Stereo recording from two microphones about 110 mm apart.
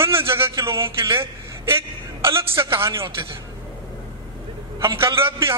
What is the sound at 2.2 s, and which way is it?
Speech, 25° right (ahead or behind).